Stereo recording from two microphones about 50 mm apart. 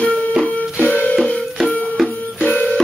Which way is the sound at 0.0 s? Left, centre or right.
Left.